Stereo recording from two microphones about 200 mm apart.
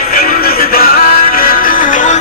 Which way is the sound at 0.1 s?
45° left (ahead or behind).